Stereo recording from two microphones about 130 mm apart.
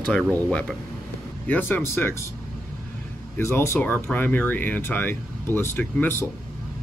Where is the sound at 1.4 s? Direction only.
15° left (ahead or behind).